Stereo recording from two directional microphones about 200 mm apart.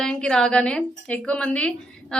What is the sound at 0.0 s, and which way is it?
A woman's voice, 5° left (ahead or behind).